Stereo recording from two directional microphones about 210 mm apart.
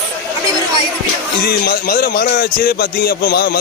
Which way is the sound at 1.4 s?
45° left (ahead or behind).